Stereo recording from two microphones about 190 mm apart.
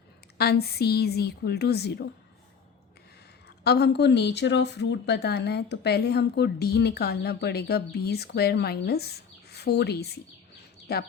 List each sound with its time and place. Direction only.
0.3 s speech: 55° left (ahead or behind)
3.6 s speech: 60° left (ahead or behind)